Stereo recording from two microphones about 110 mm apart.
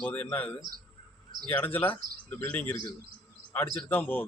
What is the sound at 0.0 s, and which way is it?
A man's voice, 15° left (ahead or behind).